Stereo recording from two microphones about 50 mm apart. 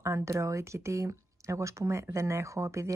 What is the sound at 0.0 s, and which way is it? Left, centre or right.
Speech, right.